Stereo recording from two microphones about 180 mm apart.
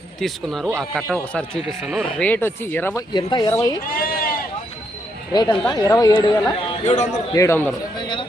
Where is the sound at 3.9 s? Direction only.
55° left (ahead or behind).